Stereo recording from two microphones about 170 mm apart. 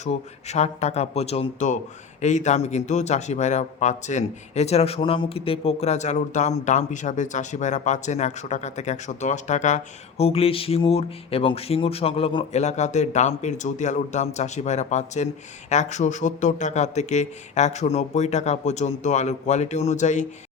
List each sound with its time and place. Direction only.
0.0 s speech: 40° left (ahead or behind)